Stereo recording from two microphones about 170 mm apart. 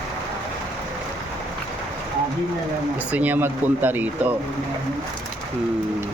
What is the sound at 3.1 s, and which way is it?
Speech, 10° right (ahead or behind).